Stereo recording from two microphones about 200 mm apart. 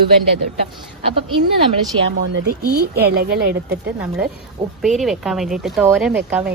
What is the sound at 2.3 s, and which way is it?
Speech, 55° right (ahead or behind).